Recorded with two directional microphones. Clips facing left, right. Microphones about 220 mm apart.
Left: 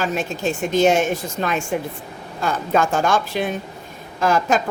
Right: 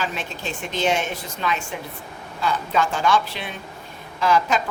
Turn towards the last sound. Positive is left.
turn(degrees=45)  # may be behind; listen again after turning